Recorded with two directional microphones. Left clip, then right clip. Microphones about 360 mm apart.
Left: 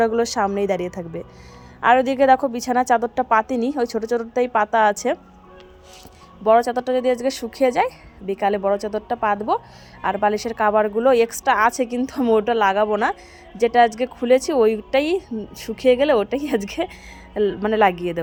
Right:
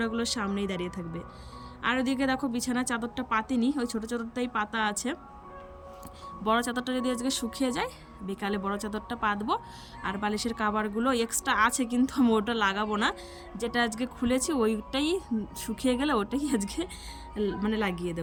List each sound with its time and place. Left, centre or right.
0.0 s a woman's voice: centre
6.4 s a woman's voice: centre
17.3 s speech: left
17.7 s a woman's voice: centre